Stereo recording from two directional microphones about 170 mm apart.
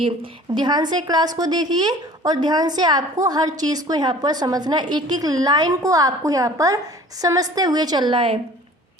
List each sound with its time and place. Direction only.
0.0 s a woman's voice: 30° right (ahead or behind)